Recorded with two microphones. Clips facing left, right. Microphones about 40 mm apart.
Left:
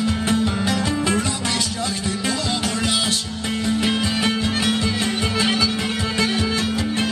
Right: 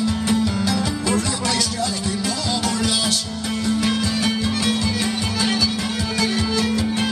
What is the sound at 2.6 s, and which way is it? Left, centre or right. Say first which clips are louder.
Music: right 1 dB; left.